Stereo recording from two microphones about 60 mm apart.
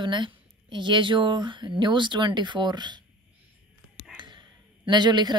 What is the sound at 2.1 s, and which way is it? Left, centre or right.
Speech, right.